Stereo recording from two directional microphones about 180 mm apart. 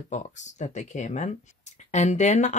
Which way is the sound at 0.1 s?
40° left (ahead or behind).